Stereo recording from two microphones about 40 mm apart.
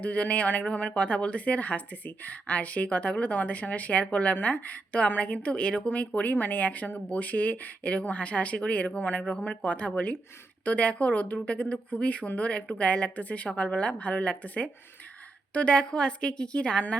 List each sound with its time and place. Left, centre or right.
0.0 s speech: left
6.3 s a woman's voice: left